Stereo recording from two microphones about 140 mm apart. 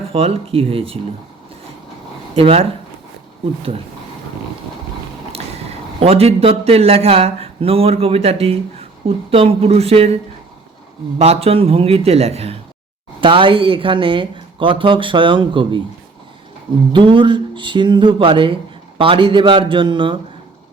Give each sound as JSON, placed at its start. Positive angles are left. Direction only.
{"t": 0.1, "sound": "speech", "side_deg": -45}
{"t": 2.3, "sound": "speech", "side_deg": -45}
{"t": 6.0, "sound": "speech", "side_deg": -45}
{"t": 11.2, "sound": "speech", "side_deg": -45}
{"t": 16.9, "sound": "speech", "side_deg": -35}